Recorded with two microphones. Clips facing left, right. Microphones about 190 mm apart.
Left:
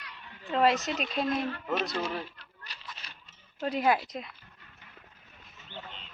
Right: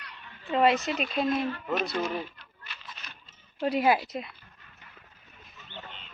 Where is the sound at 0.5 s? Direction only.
Centre (ahead or behind).